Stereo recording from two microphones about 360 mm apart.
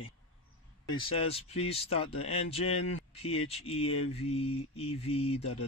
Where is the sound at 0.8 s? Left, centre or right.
Centre.